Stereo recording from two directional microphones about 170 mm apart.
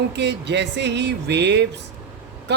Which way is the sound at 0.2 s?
90° right.